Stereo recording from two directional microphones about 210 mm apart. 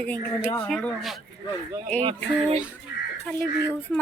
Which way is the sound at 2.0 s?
30° right (ahead or behind).